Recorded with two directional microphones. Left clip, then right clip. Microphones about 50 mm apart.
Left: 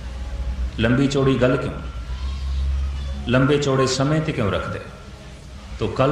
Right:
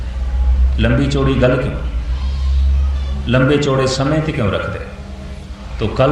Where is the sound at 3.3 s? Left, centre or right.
Left.